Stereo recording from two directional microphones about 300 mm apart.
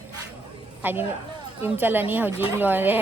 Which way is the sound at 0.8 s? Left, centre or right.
Centre.